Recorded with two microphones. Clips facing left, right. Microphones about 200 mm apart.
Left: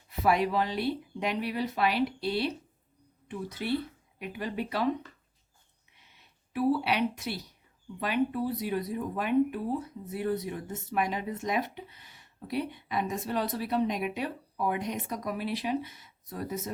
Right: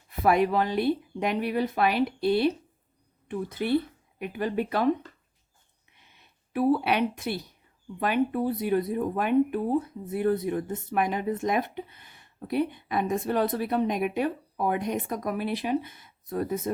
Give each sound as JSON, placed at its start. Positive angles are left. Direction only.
{"t": 0.2, "sound": "speech", "side_deg": -50}
{"t": 6.1, "sound": "speech", "side_deg": -50}